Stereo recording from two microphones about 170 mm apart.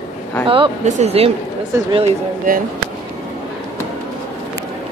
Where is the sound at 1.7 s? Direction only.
15° right (ahead or behind).